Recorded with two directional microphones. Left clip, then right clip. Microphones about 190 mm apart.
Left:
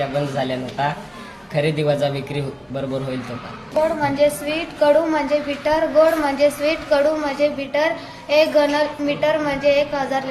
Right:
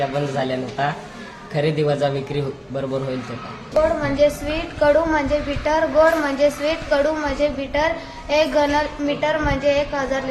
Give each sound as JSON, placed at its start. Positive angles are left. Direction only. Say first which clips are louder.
{"t": 0.1, "sound": "a woman's voice", "louder": "even", "side_deg": -10}
{"t": 4.0, "sound": "a woman's voice", "louder": "even", "side_deg": -15}